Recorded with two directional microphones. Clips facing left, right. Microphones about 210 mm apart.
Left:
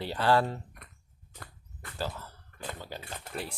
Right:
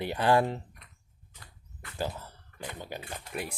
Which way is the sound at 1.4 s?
55° left (ahead or behind).